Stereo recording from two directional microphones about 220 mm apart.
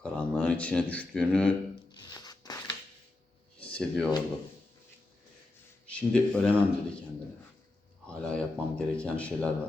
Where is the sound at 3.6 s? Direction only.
5° left (ahead or behind).